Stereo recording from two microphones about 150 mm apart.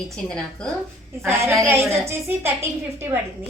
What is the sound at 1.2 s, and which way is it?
A woman's voice, 15° right (ahead or behind).